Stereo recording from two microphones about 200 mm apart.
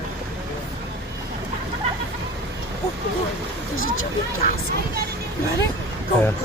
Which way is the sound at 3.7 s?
90° left.